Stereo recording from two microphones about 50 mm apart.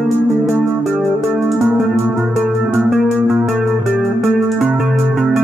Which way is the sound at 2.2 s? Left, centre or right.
Centre.